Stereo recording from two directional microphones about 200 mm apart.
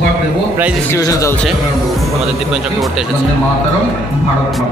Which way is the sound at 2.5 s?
5° right (ahead or behind).